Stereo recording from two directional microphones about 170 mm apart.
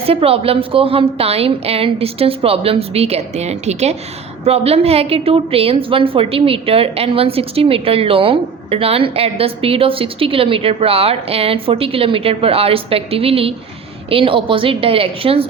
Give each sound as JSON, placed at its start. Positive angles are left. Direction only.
{"t": 0.0, "sound": "a woman's voice", "side_deg": -35}